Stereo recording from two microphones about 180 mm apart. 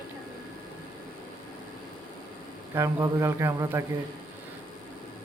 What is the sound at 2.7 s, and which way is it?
Speech, 15° right (ahead or behind).